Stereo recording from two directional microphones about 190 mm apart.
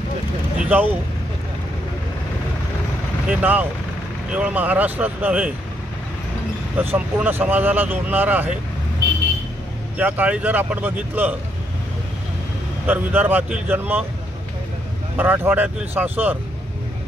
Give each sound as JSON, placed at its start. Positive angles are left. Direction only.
{"t": 0.6, "sound": "speech", "side_deg": -10}
{"t": 3.3, "sound": "speech", "side_deg": -10}
{"t": 6.8, "sound": "speech", "side_deg": -10}
{"t": 9.9, "sound": "speech", "side_deg": -10}
{"t": 12.8, "sound": "speech", "side_deg": -10}
{"t": 15.1, "sound": "speech", "side_deg": -10}